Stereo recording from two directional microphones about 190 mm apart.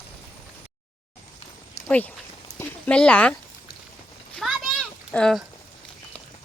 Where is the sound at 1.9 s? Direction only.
10° left (ahead or behind).